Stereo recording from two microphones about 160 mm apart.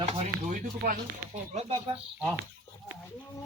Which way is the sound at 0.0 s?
50° right (ahead or behind).